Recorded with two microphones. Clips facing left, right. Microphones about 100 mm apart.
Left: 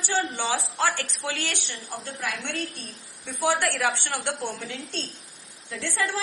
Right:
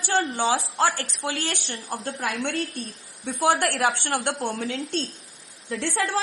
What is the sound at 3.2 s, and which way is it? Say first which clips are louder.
A woman's voice: right 3 dB; 45° right (ahead or behind).